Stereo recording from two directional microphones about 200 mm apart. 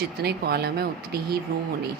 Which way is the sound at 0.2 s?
50° right (ahead or behind).